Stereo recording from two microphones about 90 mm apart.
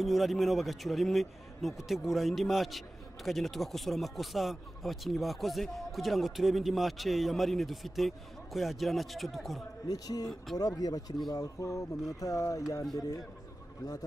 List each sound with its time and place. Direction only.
0.0 s speech: centre (ahead or behind)
9.8 s a man's voice: 45° left (ahead or behind)